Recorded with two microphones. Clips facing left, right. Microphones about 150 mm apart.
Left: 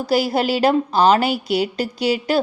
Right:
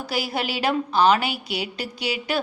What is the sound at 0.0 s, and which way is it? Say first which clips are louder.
A woman's voice: left 8 dB; 40° left (ahead or behind).